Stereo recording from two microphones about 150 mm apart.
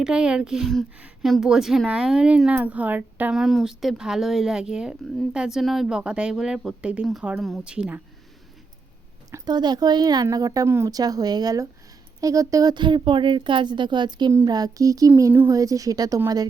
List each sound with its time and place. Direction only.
0.0 s a woman's voice: 5° right (ahead or behind)
9.3 s a woman's voice: 30° right (ahead or behind)